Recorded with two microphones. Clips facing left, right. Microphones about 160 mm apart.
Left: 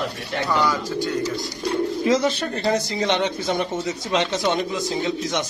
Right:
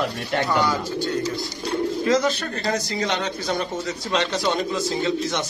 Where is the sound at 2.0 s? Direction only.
25° left (ahead or behind).